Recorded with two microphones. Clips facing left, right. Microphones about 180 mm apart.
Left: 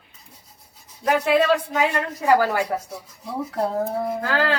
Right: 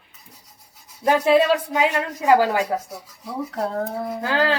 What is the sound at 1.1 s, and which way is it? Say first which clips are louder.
A woman's voice: right 2 dB; 25° right (ahead or behind).